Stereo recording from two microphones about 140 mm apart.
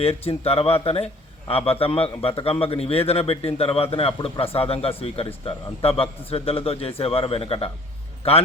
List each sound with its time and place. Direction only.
0.0 s a man's voice: 45° left (ahead or behind)